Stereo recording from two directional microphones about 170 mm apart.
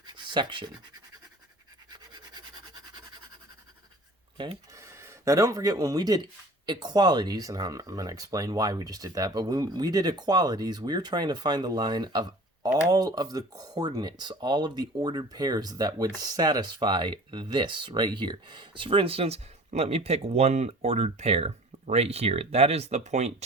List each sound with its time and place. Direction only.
0.0 s scratch: 25° right (ahead or behind)
1.9 s scratch: 25° right (ahead or behind)
4.7 s speech: 15° right (ahead or behind); by 23.3 s 40° right (ahead or behind)